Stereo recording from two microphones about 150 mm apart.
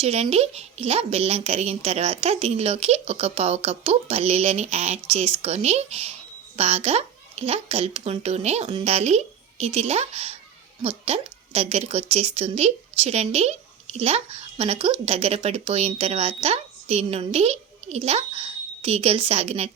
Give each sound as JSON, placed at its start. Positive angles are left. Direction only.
{"t": 0.0, "sound": "a woman's voice", "side_deg": -45}